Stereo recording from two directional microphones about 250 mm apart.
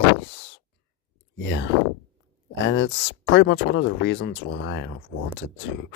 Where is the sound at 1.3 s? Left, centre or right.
Left.